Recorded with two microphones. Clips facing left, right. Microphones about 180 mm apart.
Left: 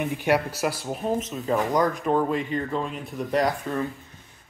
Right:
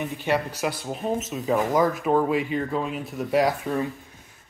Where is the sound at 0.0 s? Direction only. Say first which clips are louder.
Left 2 dB; 10° left (ahead or behind); by 3.5 s 5° right (ahead or behind).